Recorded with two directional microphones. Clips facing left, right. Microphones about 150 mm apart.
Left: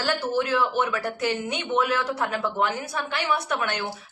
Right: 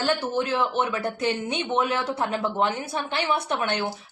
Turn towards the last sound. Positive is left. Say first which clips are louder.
# right 1 dB
turn(degrees=-25)  # may be behind; listen again after turning